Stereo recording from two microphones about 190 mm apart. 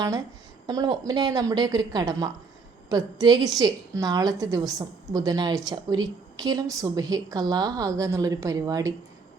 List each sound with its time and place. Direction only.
0.7 s a woman's voice: 20° right (ahead or behind)